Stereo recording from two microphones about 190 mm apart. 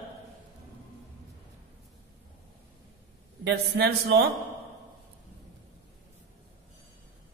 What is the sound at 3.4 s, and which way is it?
Speech, 60° right (ahead or behind).